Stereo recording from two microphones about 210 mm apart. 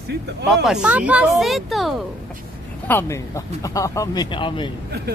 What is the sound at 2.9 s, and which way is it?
Speech, 10° left (ahead or behind).